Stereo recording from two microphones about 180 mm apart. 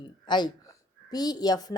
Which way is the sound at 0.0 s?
25° left (ahead or behind).